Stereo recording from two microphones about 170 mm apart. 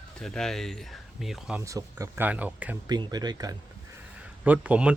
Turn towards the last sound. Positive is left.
turn(degrees=-5)  # may be behind; listen again after turning